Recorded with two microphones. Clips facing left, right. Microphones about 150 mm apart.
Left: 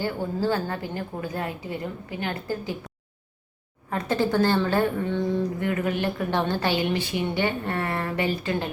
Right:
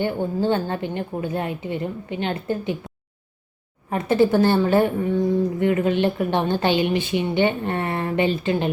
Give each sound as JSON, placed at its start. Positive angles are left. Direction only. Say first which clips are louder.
{"t": 0.0, "sound": "a woman's voice", "louder": "right 4 dB", "side_deg": -20}
{"t": 3.8, "sound": "a woman's voice", "louder": "right 6 dB", "side_deg": -20}